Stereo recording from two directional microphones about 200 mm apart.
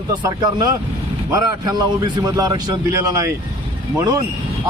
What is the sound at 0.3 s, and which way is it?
Speech, 20° right (ahead or behind).